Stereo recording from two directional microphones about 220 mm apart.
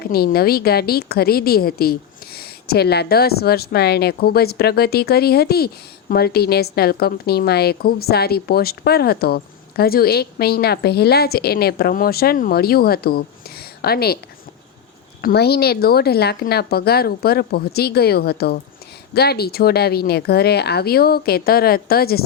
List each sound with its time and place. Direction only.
0.0 s a woman's voice: 45° left (ahead or behind)
15.2 s a woman's voice: 45° left (ahead or behind)